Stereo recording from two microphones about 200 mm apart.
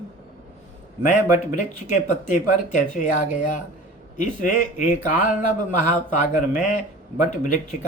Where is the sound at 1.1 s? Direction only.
40° left (ahead or behind).